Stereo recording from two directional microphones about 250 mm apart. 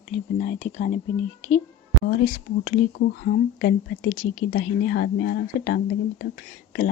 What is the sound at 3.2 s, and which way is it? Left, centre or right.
Speech, left.